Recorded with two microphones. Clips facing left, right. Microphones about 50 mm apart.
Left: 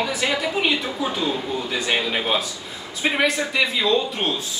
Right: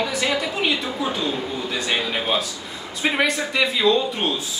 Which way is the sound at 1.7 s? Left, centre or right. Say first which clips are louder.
Left 1 dB; centre.